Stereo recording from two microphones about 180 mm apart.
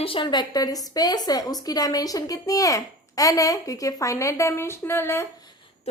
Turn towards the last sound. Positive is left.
turn(degrees=15)  # may be behind; listen again after turning